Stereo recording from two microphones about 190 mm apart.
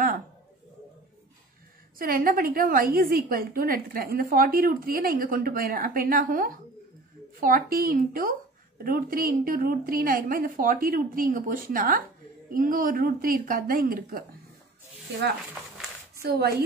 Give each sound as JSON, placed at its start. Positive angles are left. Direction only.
{"t": 2.0, "sound": "a woman's voice", "side_deg": -50}
{"t": 16.2, "sound": "speech", "side_deg": -55}